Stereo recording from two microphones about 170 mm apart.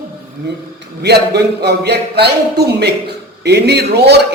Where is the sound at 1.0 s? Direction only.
75° right (ahead or behind).